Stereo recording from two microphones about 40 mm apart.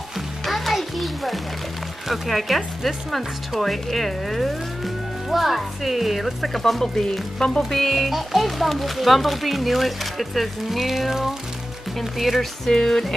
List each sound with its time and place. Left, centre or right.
0.5 s a sound: centre
2.0 s speech: centre
7.7 s speech: centre
12.4 s speech: centre